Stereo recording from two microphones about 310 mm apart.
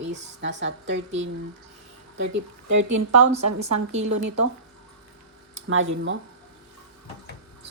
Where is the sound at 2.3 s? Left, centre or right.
Right.